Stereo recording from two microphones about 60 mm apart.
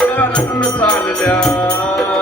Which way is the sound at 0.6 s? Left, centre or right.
Left.